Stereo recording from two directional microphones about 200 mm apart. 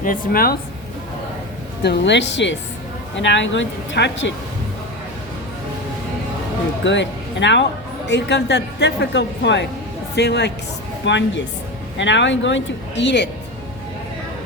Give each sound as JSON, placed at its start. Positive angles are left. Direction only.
{"t": 0.0, "sound": "speech", "side_deg": 45}
{"t": 1.8, "sound": "a woman's voice", "side_deg": 60}
{"t": 6.8, "sound": "a woman's voice", "side_deg": 65}